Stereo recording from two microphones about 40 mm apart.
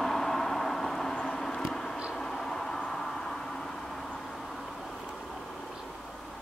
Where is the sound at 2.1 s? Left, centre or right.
Centre.